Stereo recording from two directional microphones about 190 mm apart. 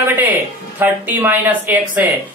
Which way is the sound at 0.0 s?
10° right (ahead or behind).